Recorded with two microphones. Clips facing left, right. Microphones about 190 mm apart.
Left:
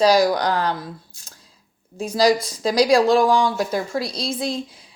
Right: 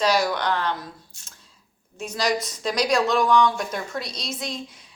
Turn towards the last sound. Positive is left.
turn(degrees=30)  # may be behind; listen again after turning